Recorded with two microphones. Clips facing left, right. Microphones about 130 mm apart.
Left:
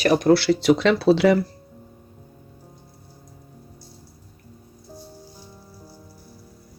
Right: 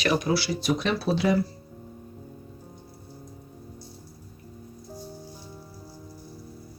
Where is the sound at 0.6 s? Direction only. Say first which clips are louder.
Left 9 dB; 85° left.